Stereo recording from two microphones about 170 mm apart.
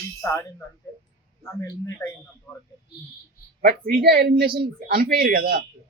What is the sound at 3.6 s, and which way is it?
Speech, 60° right (ahead or behind).